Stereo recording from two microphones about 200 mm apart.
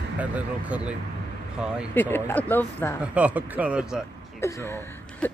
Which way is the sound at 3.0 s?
5° right (ahead or behind).